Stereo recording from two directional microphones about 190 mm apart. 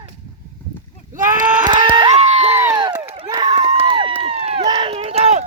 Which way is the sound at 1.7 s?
25° right (ahead or behind).